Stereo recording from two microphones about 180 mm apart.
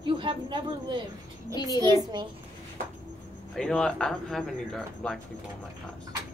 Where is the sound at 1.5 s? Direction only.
20° left (ahead or behind).